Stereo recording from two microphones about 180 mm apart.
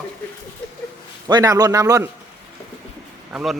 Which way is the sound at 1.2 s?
20° right (ahead or behind).